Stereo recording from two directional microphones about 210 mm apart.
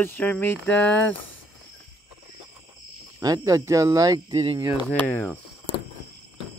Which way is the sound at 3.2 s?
15° right (ahead or behind).